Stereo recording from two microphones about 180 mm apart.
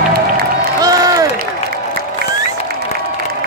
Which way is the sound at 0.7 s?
20° right (ahead or behind).